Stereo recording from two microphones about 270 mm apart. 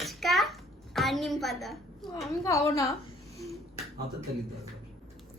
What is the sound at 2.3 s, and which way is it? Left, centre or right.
Speech, centre.